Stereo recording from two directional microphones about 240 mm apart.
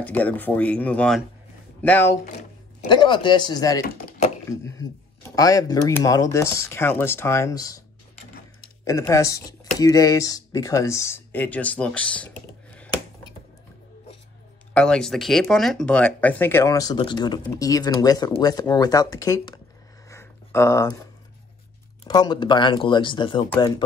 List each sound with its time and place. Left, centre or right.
0.0 s speech: centre
2.9 s speech: centre
4.5 s a sound: centre
5.3 s speech: centre
8.8 s speech: centre
14.7 s speech: centre
20.1 s a sound: centre
22.0 s speech: centre